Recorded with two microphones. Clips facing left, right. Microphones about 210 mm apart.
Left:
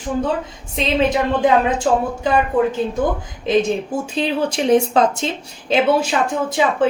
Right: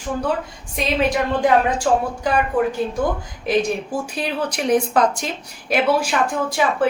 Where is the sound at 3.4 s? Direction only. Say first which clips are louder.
Left 3 dB; 20° left (ahead or behind).